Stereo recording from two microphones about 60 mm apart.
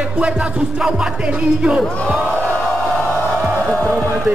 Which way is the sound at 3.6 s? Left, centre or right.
Left.